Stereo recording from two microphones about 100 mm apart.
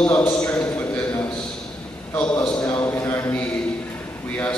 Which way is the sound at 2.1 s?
15° left (ahead or behind).